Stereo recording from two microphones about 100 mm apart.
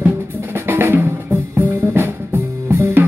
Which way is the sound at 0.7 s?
20° right (ahead or behind).